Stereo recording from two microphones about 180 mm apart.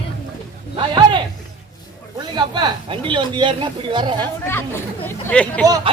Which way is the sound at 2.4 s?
25° right (ahead or behind).